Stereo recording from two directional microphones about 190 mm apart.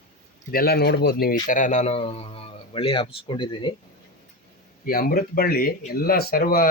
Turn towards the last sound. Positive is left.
turn(degrees=50)  # may be behind; listen again after turning